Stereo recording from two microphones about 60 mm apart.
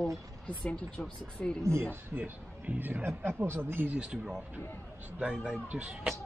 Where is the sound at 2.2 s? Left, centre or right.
Right.